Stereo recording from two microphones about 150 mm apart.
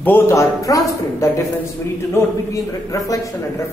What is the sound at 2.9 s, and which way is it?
Speech, 20° left (ahead or behind).